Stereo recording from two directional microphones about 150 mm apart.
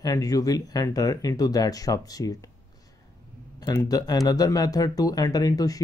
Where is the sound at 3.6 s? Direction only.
25° left (ahead or behind).